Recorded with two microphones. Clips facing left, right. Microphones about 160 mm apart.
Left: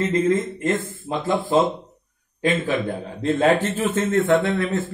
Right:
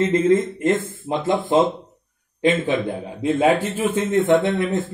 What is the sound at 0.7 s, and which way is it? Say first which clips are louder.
Speech: right 5 dB; 25° right (ahead or behind).